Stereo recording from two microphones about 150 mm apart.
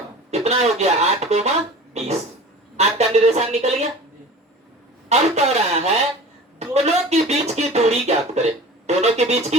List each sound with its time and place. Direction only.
0.3 s speech: 45° right (ahead or behind)
5.0 s speech: 45° right (ahead or behind)